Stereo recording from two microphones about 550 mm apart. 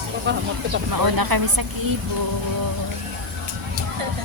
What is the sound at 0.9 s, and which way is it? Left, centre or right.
Speech, right.